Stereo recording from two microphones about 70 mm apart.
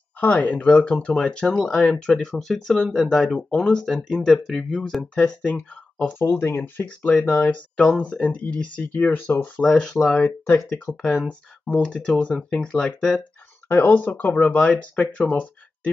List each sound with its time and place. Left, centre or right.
0.2 s speech: left
6.1 s speech: left
10.9 s speech: centre
13.7 s speech: left
13.9 s speech: left